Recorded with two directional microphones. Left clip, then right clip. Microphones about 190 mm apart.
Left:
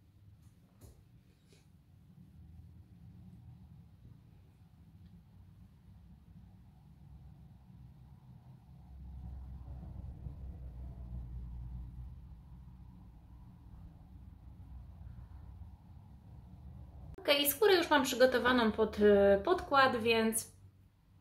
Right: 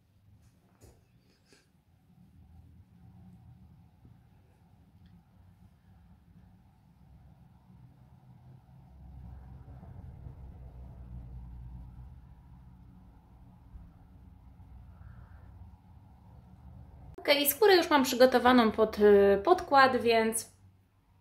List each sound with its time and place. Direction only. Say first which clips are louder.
17.2 s a woman's voice: right 4 dB; 15° right (ahead or behind)